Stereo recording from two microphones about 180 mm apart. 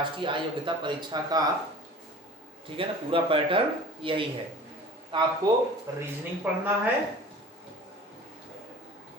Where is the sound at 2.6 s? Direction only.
30° right (ahead or behind).